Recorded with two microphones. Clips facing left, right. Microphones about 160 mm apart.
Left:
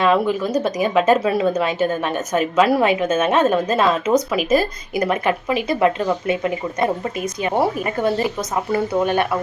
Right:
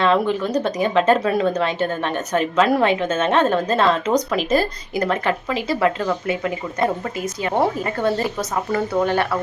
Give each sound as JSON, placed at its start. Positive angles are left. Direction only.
{"t": 0.0, "sound": "speech", "side_deg": 10}